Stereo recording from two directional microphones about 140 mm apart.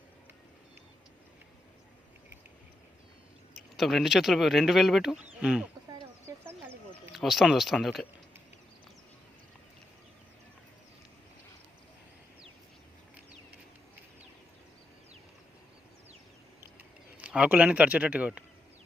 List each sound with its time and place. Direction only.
3.8 s speech: centre (ahead or behind)
6.2 s a sound: 15° right (ahead or behind)
7.1 s speech: centre (ahead or behind)
16.7 s speech: 10° right (ahead or behind)